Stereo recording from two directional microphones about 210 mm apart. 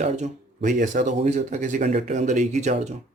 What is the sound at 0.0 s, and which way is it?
Speech, 35° right (ahead or behind).